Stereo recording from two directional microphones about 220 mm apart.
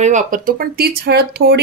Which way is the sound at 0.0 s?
35° right (ahead or behind).